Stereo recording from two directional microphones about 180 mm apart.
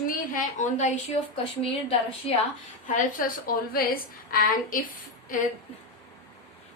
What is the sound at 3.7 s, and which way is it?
Speech, 55° left (ahead or behind).